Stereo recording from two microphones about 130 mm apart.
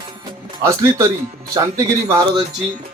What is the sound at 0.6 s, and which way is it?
Speech, 25° right (ahead or behind).